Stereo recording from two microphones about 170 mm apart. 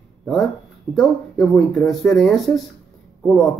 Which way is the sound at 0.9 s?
Centre (ahead or behind).